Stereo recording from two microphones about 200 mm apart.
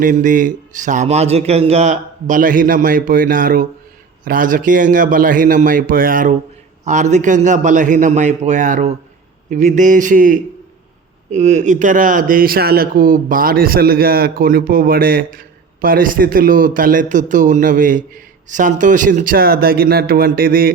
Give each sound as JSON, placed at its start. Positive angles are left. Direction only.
{"t": 0.0, "sound": "a man's voice", "side_deg": -40}